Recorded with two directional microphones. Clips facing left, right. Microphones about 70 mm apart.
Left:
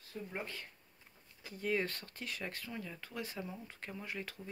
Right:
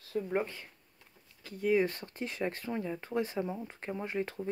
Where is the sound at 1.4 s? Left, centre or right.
Centre.